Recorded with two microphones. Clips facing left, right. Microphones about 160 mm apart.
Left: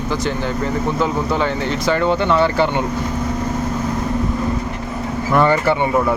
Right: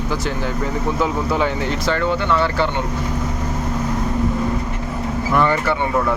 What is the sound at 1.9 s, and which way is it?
Speech, 15° left (ahead or behind).